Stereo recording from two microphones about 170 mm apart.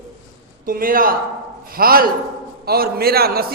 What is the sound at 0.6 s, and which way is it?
A man's voice, 55° right (ahead or behind).